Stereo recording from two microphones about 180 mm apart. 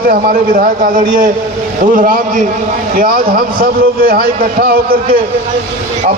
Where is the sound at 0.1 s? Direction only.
50° right (ahead or behind).